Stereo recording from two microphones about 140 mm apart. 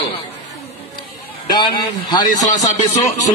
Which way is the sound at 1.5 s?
30° left (ahead or behind).